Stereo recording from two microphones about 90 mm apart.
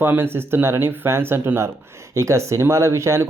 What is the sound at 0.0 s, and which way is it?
Speech, 25° right (ahead or behind).